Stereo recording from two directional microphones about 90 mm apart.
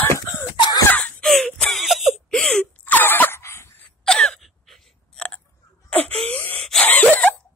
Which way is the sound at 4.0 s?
10° left (ahead or behind).